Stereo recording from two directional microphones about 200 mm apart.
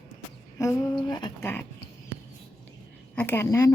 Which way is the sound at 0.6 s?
20° left (ahead or behind).